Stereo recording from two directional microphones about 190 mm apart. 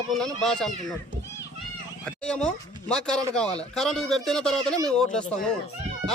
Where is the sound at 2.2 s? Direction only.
5° left (ahead or behind).